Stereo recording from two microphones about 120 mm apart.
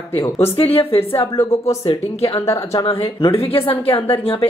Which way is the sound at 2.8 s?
50° left (ahead or behind).